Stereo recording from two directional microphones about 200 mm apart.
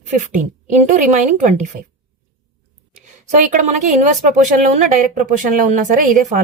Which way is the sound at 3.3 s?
40° right (ahead or behind).